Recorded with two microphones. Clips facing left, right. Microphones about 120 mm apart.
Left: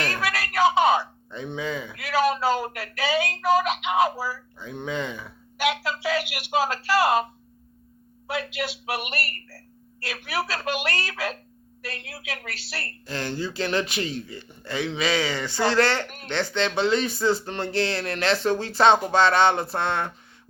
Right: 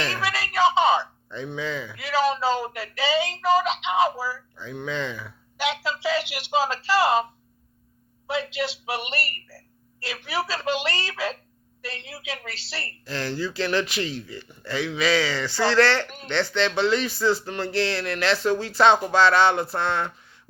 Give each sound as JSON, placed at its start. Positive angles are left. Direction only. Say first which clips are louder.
{"t": 0.2, "sound": "a sound", "louder": "even", "side_deg": 0}
{"t": 1.3, "sound": "speech", "louder": "even", "side_deg": 20}
{"t": 2.0, "sound": "speech", "louder": "even", "side_deg": 0}
{"t": 4.6, "sound": "speech", "louder": "even", "side_deg": 20}
{"t": 5.5, "sound": "speech", "louder": "left 1 dB", "side_deg": 5}
{"t": 8.3, "sound": "speech", "louder": "right 2 dB", "side_deg": 5}
{"t": 13.1, "sound": "speech", "louder": "right 1 dB", "side_deg": 20}